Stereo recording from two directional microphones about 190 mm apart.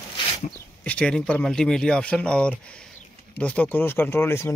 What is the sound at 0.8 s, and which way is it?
Speech, 5° left (ahead or behind).